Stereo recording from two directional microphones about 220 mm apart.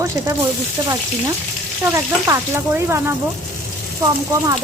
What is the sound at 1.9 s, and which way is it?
Speech, 10° right (ahead or behind).